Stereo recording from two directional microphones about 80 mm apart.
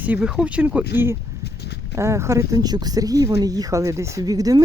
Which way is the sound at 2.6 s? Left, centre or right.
Right.